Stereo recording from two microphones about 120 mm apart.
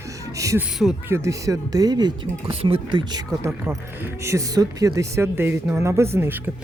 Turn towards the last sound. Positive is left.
turn(degrees=-15)  # may be behind; listen again after turning